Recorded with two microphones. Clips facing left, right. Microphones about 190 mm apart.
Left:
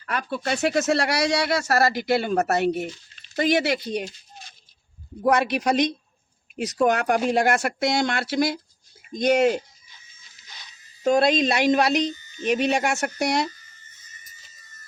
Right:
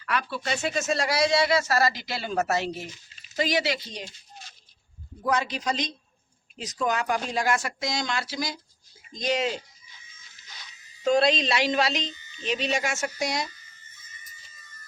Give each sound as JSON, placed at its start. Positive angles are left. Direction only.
{"t": 0.0, "sound": "speech", "side_deg": 45}
{"t": 5.2, "sound": "speech", "side_deg": 65}
{"t": 11.0, "sound": "speech", "side_deg": 45}